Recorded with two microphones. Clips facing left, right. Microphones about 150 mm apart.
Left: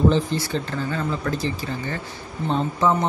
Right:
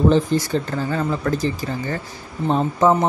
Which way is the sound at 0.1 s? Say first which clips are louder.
Right 5 dB; 45° right (ahead or behind).